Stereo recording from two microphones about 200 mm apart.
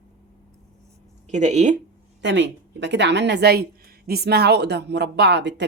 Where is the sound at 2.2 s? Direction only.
60° right (ahead or behind).